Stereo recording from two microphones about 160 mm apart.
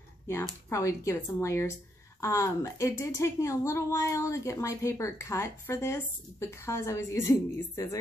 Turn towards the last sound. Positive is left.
turn(degrees=20)  # may be behind; listen again after turning